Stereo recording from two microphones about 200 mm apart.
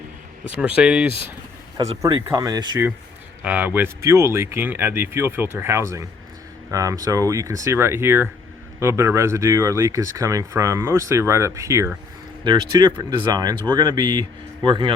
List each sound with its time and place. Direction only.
0.5 s speech: 5° right (ahead or behind)
2.0 s speech: 20° right (ahead or behind)
3.4 s speech: 10° right (ahead or behind); by 14.9 s 25° right (ahead or behind)